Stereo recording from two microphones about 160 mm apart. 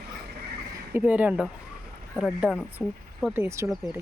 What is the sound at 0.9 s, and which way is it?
Speech, 10° right (ahead or behind).